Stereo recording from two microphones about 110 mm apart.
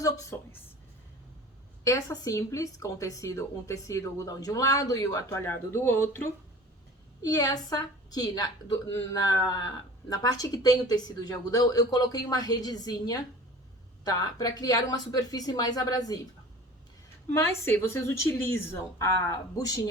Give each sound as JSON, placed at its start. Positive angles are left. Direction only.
{"t": 0.3, "sound": "speech", "side_deg": 20}
{"t": 1.8, "sound": "speech", "side_deg": 30}
{"t": 7.2, "sound": "a woman's voice", "side_deg": 35}
{"t": 17.3, "sound": "speech", "side_deg": 20}